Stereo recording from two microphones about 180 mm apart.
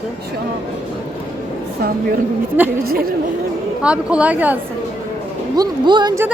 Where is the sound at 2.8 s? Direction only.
55° right (ahead or behind).